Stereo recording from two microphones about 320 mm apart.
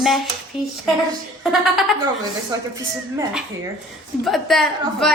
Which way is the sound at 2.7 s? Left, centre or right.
Centre.